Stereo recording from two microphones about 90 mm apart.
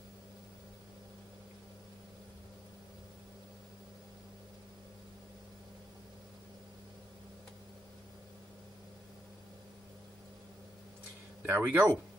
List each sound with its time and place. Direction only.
11.4 s speech: 25° right (ahead or behind)